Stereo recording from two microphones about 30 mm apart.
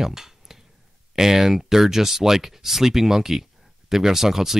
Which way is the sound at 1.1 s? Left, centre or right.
Centre.